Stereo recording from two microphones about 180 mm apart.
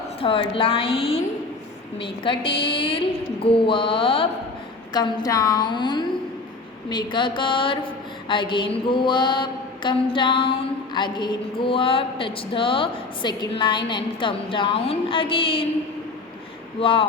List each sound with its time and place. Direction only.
0.2 s a woman's voice: 30° left (ahead or behind)
16.8 s a woman's voice: 30° left (ahead or behind)